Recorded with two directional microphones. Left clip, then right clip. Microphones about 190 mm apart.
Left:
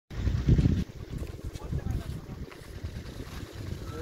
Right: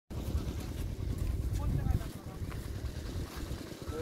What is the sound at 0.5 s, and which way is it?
Boat, 20° left (ahead or behind).